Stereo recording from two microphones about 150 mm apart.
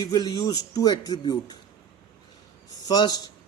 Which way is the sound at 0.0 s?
25° left (ahead or behind).